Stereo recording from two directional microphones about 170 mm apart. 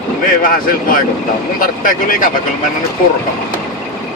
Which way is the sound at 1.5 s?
55° left (ahead or behind).